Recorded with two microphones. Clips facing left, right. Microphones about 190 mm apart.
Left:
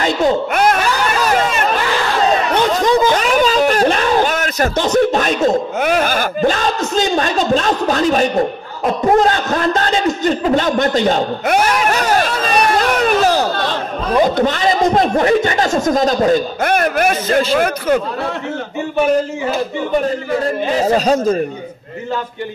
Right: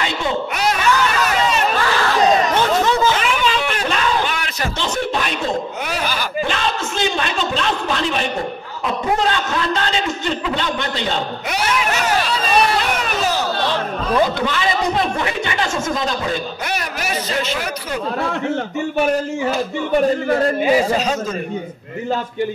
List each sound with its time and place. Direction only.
0.0 s a sound: 45° left (ahead or behind)
2.6 s chatter: 15° left (ahead or behind)
3.1 s a man's voice: 40° left (ahead or behind)
21.0 s speech: 35° left (ahead or behind)